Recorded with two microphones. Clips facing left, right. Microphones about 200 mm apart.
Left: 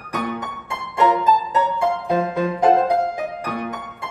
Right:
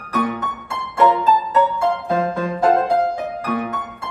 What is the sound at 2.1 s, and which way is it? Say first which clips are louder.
Music: even; 15° left (ahead or behind).